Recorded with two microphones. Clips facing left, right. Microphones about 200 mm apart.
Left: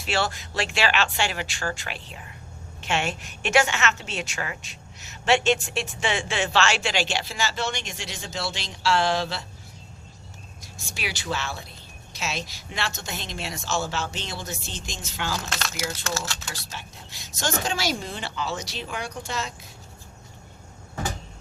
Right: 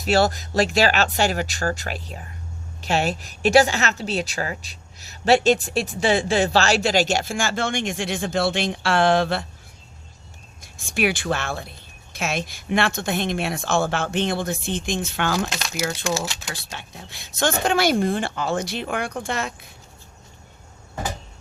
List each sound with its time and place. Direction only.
0.0 s a woman's voice: 40° right (ahead or behind); by 9.5 s 55° right (ahead or behind)
10.6 s speech: 55° right (ahead or behind)
15.4 s speech: 15° right (ahead or behind)
16.7 s speech: 60° right (ahead or behind)